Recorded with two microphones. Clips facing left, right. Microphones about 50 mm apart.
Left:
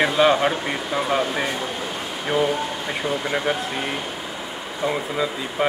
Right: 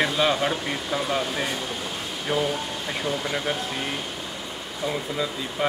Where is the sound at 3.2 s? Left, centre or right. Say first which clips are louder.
Left 4 dB; left.